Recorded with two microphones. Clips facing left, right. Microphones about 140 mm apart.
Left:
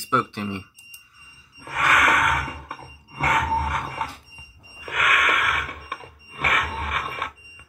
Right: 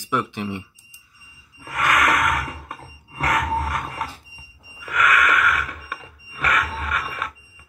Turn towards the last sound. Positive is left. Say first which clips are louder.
# right 1 dB
turn(degrees=50)  # may be behind; listen again after turning